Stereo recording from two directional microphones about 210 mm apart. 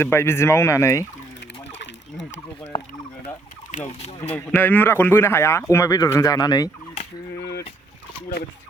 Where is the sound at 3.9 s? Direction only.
30° left (ahead or behind).